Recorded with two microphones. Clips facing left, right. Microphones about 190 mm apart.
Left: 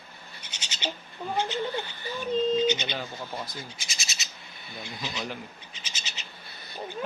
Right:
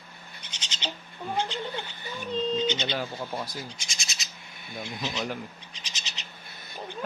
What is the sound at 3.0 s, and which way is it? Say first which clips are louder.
Speech: right 3 dB; 10° right (ahead or behind).